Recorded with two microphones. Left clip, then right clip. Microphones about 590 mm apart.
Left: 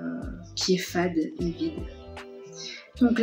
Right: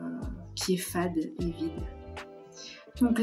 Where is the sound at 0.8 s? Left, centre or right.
Right.